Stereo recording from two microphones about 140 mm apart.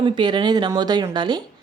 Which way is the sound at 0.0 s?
35° right (ahead or behind).